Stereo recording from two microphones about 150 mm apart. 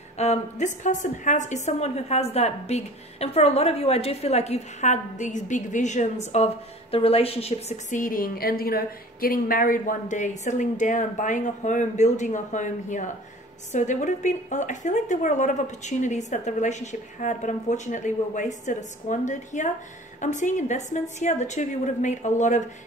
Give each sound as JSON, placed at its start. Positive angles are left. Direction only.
{"t": 0.2, "sound": "a woman's voice", "side_deg": 50}